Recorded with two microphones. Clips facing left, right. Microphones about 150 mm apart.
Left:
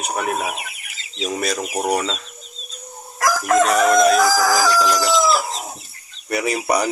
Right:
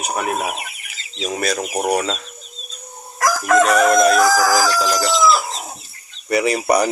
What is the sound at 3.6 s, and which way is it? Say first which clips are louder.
Speech: right 1 dB; centre (ahead or behind).